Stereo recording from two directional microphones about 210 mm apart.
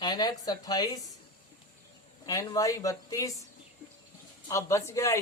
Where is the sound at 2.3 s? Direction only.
15° left (ahead or behind).